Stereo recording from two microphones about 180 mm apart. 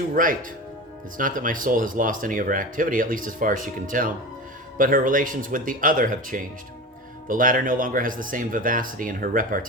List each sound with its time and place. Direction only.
0.1 s speech: 50° right (ahead or behind)